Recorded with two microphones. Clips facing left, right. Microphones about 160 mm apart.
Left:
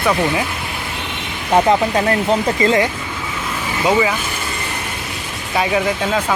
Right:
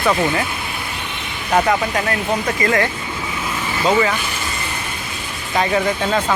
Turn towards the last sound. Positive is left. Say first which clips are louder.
# even
turn(degrees=5)  # may be behind; listen again after turning